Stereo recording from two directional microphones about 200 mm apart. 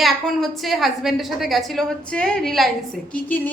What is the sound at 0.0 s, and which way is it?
A woman's voice, centre (ahead or behind).